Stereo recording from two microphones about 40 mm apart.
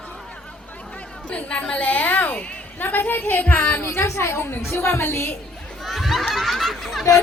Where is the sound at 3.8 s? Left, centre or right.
Left.